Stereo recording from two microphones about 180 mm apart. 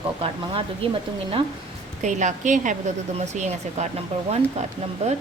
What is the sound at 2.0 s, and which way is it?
A woman's voice, 40° right (ahead or behind).